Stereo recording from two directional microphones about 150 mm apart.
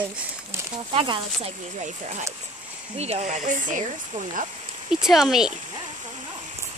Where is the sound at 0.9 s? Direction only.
40° right (ahead or behind); by 4.4 s 60° right (ahead or behind).